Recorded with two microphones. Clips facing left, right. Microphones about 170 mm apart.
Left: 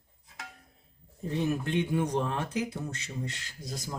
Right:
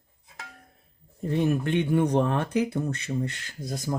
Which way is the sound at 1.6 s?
60° right (ahead or behind).